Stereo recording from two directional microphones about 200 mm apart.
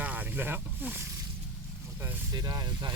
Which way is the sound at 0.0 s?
10° right (ahead or behind).